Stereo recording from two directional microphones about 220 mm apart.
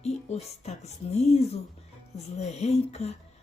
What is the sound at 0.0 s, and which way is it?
Speech, 30° left (ahead or behind).